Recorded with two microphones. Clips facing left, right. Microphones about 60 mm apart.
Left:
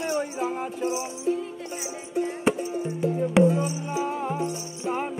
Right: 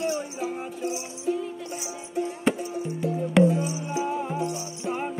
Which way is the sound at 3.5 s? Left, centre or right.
Left.